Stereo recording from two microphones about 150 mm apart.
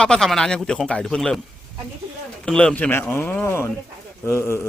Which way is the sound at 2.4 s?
5° left (ahead or behind).